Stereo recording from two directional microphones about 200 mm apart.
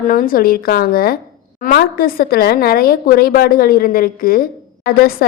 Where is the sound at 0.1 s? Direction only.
45° left (ahead or behind).